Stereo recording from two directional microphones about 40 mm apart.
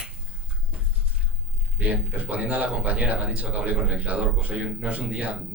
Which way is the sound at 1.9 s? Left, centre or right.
Right.